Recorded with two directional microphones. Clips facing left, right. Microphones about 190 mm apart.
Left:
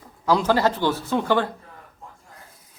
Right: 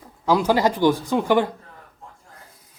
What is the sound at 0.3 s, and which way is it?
Speech, 10° right (ahead or behind).